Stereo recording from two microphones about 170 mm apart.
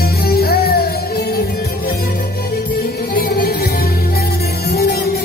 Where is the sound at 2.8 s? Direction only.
60° left (ahead or behind).